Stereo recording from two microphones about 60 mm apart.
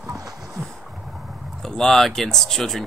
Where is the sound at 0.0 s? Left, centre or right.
Right.